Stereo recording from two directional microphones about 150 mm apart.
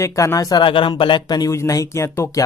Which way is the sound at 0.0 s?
20° left (ahead or behind).